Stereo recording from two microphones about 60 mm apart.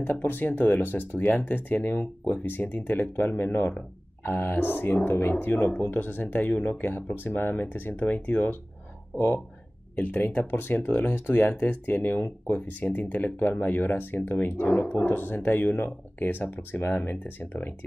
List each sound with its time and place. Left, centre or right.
0.0 s speech: left
9.9 s speech: left
14.3 s speech: left